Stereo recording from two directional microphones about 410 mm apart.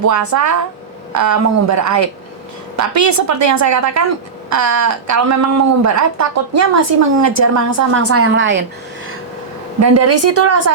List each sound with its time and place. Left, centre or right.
0.0 s a woman's voice: right
9.8 s a woman's voice: right